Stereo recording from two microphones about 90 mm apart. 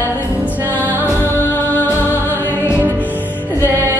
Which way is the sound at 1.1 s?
25° left (ahead or behind).